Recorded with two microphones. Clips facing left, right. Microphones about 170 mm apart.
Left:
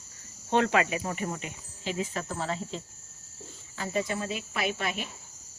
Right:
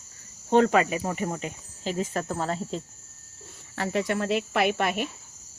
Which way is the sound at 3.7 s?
70° right (ahead or behind).